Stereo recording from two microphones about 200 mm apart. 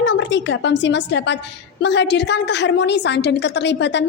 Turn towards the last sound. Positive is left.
turn(degrees=60)  # may be behind; listen again after turning